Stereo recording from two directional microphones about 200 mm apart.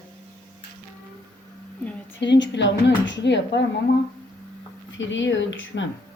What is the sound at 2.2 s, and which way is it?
Speech, 60° left (ahead or behind).